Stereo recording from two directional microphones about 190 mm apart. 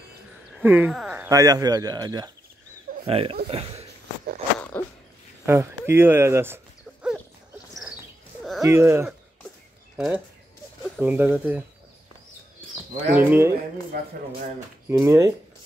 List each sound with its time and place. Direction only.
0.6 s speech: 10° right (ahead or behind); by 3.8 s 30° right (ahead or behind)
4.6 s a sound: 10° left (ahead or behind)
5.9 s a sound: 10° right (ahead or behind)
8.6 s speech: 15° right (ahead or behind)
13.1 s speech: 10° right (ahead or behind)
13.9 s speech: 55° right (ahead or behind)
14.9 s speech: 15° right (ahead or behind)